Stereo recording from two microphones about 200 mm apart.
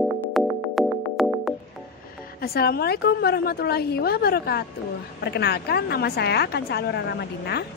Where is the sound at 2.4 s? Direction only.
50° left (ahead or behind).